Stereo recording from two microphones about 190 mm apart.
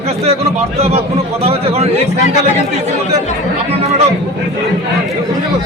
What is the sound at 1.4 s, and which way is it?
Speech, 30° right (ahead or behind).